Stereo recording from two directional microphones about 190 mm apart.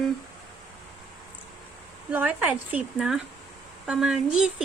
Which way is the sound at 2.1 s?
10° right (ahead or behind).